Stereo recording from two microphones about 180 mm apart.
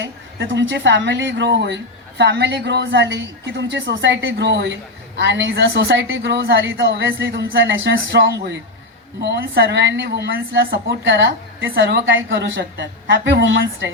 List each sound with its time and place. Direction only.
0.0 s speech: 85° right
6.7 s a man's voice: 85° right
9.2 s speech: 70° right (ahead or behind)